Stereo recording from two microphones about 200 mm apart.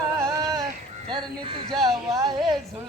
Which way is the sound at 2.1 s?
15° right (ahead or behind).